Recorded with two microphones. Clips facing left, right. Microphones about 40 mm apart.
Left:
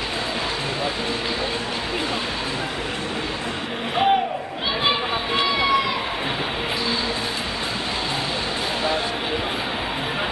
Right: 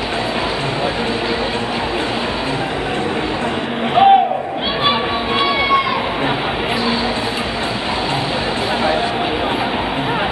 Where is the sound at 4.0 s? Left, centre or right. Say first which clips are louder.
Right 9 dB; centre.